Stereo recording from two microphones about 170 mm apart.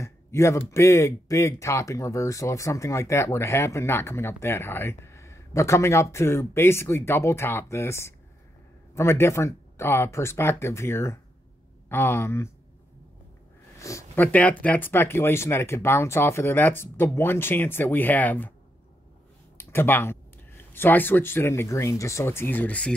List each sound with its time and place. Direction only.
0.0 s speech: 15° left (ahead or behind)
13.7 s speech: 15° left (ahead or behind)
19.5 s speech: 15° left (ahead or behind)